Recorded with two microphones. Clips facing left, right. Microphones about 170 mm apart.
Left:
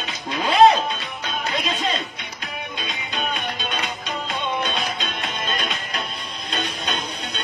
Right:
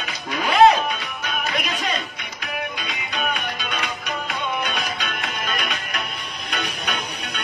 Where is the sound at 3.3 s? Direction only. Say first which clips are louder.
Left 1 dB; 25° left (ahead or behind).